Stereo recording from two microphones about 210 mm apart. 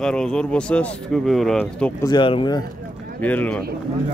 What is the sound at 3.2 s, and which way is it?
Speech, 10° left (ahead or behind).